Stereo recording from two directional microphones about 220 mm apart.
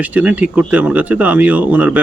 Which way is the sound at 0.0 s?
5° right (ahead or behind).